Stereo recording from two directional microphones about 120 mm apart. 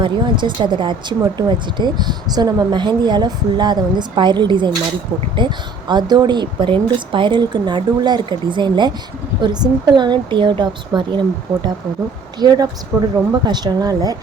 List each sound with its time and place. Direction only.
0.0 s speech: 40° right (ahead or behind)